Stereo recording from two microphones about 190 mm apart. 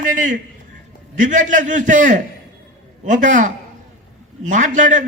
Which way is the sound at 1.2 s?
40° right (ahead or behind).